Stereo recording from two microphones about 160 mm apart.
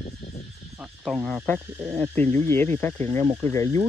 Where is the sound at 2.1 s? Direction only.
15° left (ahead or behind).